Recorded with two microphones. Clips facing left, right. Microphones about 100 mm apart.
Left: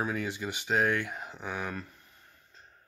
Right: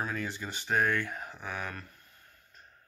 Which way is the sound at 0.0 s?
10° left (ahead or behind).